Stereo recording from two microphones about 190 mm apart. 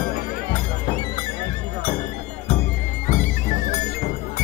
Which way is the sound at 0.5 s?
25° left (ahead or behind).